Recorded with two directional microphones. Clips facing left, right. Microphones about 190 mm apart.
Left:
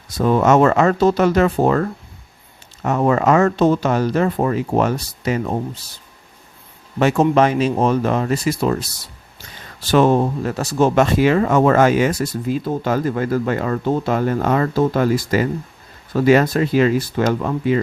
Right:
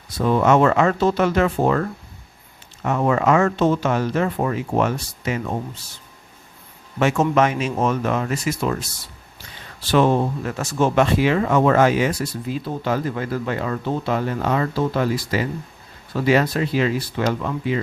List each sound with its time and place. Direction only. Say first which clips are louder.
0.2 s speech: left 3 dB; 45° left (ahead or behind)
7.0 s speech: left 3 dB; 35° left (ahead or behind)